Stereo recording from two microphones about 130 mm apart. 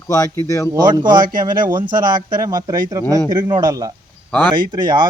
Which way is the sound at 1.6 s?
35° right (ahead or behind).